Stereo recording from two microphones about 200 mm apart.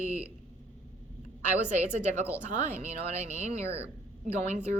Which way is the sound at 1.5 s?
35° right (ahead or behind).